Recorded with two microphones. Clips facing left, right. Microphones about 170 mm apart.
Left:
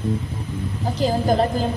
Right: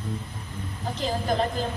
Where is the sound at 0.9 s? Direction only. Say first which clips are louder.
Left 7 dB; 35° left (ahead or behind).